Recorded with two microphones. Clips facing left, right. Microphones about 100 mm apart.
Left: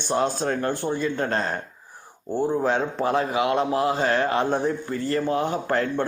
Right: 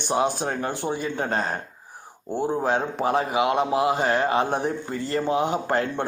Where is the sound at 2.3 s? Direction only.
15° right (ahead or behind).